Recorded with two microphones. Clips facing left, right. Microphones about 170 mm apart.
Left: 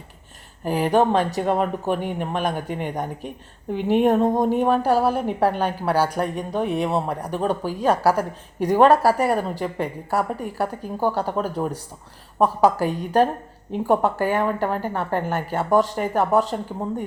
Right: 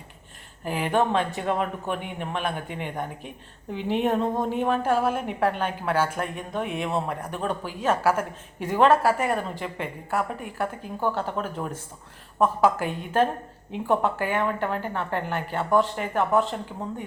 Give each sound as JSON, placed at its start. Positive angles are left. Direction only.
{"t": 0.6, "sound": "speech", "side_deg": 40}